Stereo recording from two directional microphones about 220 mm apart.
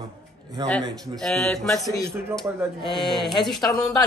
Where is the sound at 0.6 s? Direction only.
20° right (ahead or behind).